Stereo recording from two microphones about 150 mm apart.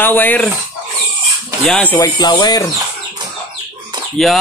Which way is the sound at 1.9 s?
25° left (ahead or behind).